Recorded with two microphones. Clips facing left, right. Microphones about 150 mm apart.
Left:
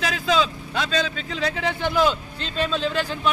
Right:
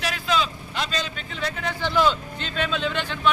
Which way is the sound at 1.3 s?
90° left.